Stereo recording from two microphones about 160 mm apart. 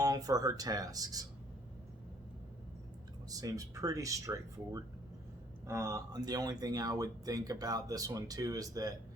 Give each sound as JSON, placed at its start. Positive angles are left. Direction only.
{"t": 0.0, "sound": "speech", "side_deg": -20}
{"t": 3.2, "sound": "speech", "side_deg": -20}